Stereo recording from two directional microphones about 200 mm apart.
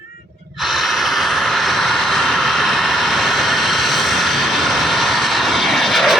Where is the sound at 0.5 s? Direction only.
Centre (ahead or behind).